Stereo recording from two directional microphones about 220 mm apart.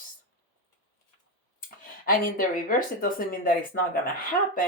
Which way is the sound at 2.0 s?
40° left (ahead or behind).